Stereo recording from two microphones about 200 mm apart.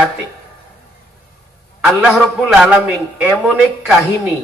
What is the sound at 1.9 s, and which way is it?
A man's voice, centre (ahead or behind).